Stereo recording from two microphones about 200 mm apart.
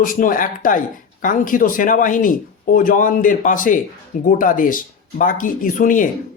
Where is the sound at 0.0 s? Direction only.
45° left (ahead or behind).